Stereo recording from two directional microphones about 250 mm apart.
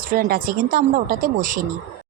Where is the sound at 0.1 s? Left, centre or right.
Right.